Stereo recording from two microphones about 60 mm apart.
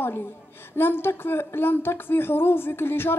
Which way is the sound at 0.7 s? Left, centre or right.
Left.